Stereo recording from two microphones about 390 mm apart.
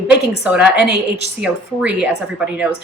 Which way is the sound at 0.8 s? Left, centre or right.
Left.